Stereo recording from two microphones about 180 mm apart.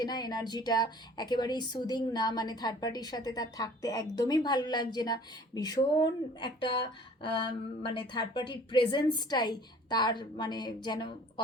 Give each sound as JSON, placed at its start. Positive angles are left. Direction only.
{"t": 0.0, "sound": "a woman's voice", "side_deg": 20}